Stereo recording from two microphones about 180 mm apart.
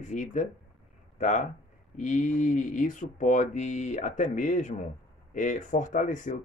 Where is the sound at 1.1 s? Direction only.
40° left (ahead or behind).